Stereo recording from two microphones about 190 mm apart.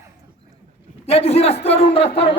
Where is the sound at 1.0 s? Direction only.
35° left (ahead or behind).